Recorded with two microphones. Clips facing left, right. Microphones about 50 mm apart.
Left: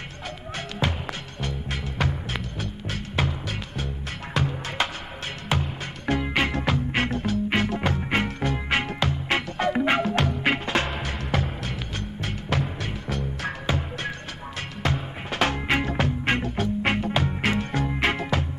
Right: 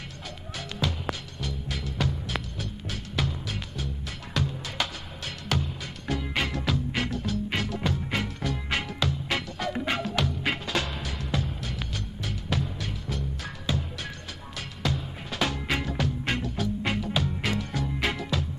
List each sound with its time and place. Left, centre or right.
1.4 s music: left
4.4 s music: left
7.2 s music: left